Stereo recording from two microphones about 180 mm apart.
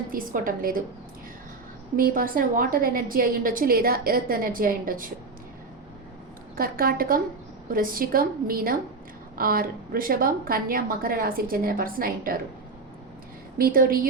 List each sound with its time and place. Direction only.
0.1 s a woman's voice: 50° right (ahead or behind)
2.0 s a woman's voice: 50° right (ahead or behind)
6.6 s a woman's voice: 55° right (ahead or behind)
13.6 s a woman's voice: 55° right (ahead or behind)